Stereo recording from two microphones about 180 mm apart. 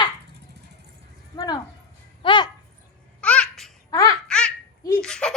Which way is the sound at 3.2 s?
5° left (ahead or behind).